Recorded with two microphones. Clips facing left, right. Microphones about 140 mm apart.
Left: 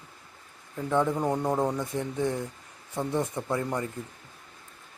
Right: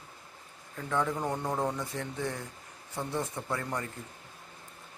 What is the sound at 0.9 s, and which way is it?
Speech, 20° left (ahead or behind).